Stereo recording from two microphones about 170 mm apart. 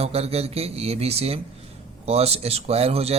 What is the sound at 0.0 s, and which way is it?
Speech, 35° right (ahead or behind).